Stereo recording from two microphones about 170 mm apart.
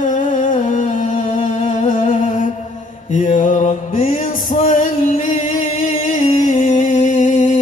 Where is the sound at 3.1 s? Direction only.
45° left (ahead or behind).